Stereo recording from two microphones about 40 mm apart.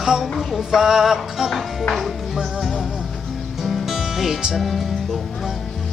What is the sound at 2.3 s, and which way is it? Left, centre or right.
Music, centre.